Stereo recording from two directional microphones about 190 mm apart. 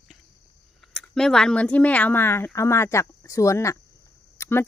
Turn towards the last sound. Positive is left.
turn(degrees=15)  # may be behind; listen again after turning